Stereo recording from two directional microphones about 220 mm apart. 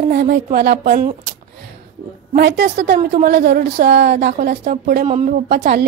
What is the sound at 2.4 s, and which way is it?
A woman's voice, 50° right (ahead or behind).